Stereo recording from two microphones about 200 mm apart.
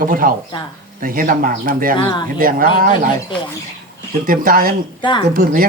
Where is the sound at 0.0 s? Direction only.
45° right (ahead or behind).